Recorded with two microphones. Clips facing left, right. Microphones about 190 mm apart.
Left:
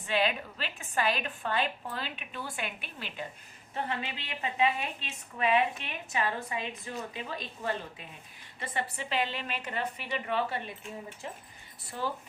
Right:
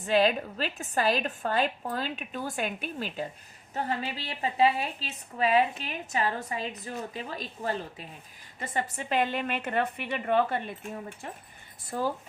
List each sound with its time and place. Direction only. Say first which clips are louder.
0.0 s a woman's voice: right 6 dB; 40° right (ahead or behind)